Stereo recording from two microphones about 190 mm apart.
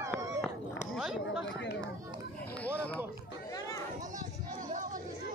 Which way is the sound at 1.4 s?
65° left (ahead or behind).